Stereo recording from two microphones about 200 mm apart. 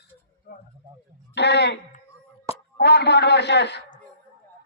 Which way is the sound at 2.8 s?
55° left (ahead or behind).